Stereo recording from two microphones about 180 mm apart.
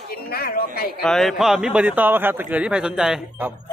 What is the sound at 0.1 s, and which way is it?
Speech, 60° left (ahead or behind).